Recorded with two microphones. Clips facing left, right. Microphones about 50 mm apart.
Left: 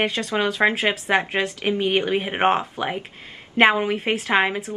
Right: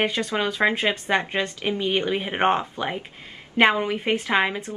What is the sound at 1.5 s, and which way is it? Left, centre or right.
Speech, left.